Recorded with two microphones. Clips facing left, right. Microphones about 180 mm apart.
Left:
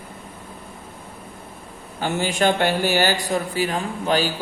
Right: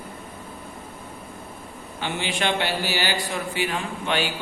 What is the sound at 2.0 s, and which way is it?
Speech, 45° left (ahead or behind).